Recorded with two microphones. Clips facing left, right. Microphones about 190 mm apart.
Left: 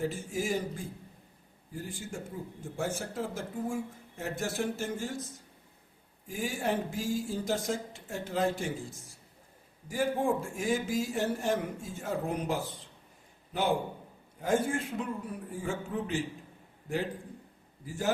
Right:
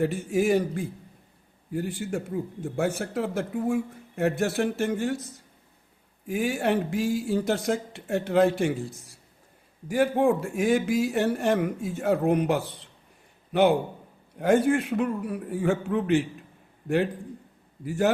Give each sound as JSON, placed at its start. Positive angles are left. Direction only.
{"t": 0.0, "sound": "a man's voice", "side_deg": -65}
{"t": 9.9, "sound": "a man's voice", "side_deg": -65}
{"t": 17.8, "sound": "speech", "side_deg": -65}